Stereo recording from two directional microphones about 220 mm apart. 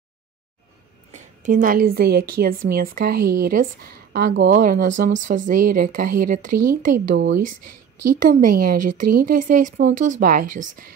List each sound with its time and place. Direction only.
1.1 s a woman's voice: 35° right (ahead or behind)
8.3 s a woman's voice: 40° right (ahead or behind)